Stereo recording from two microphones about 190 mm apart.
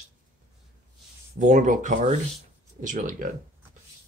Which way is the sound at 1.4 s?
40° right (ahead or behind).